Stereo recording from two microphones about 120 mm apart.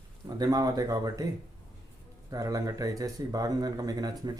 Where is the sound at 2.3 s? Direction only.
30° right (ahead or behind).